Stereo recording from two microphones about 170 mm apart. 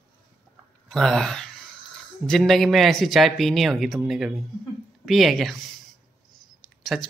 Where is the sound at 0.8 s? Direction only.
Centre (ahead or behind).